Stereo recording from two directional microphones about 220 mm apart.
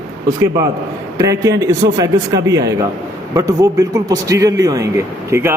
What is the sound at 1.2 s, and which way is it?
Speech, 15° right (ahead or behind).